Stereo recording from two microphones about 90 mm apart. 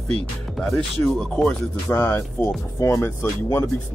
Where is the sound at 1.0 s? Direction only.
5° left (ahead or behind).